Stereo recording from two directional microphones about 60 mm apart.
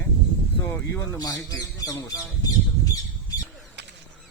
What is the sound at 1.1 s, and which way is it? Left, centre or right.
Speech, left.